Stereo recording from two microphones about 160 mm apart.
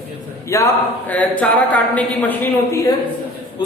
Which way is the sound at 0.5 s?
20° left (ahead or behind).